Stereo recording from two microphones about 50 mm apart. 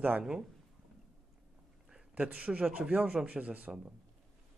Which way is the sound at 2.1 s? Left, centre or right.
Right.